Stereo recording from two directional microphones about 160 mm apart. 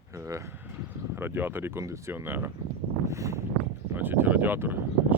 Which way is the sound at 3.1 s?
20° right (ahead or behind).